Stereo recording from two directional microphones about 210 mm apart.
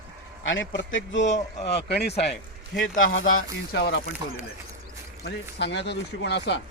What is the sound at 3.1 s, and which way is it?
Speech, 45° left (ahead or behind).